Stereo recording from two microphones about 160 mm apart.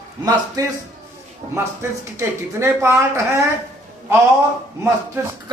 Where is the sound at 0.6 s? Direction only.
25° right (ahead or behind).